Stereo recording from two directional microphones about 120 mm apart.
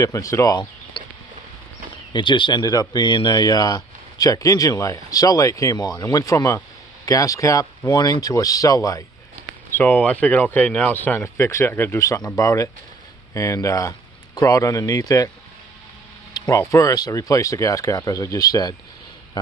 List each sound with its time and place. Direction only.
0.0 s speech: 30° left (ahead or behind)
2.1 s a man's voice: 40° left (ahead or behind)
9.8 s speech: 15° left (ahead or behind)
16.3 s speech: 25° left (ahead or behind)